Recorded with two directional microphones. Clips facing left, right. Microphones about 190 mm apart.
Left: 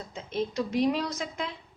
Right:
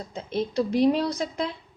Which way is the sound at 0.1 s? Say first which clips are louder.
Right 3 dB; 35° right (ahead or behind).